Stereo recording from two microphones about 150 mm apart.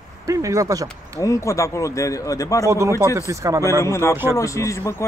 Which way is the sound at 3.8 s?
20° left (ahead or behind).